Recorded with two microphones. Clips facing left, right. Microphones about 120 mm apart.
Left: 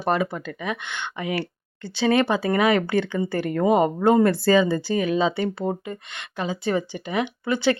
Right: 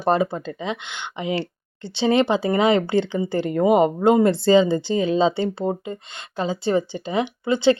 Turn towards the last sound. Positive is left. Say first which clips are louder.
# right 4 dB
turn(degrees=-25)  # may be behind; listen again after turning